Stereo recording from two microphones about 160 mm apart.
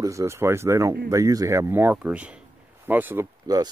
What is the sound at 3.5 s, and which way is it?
Speech, 25° right (ahead or behind).